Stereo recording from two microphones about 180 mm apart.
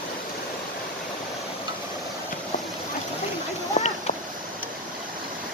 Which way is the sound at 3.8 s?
40° left (ahead or behind).